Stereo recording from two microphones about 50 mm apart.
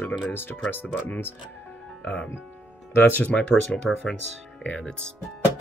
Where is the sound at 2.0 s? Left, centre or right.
Left.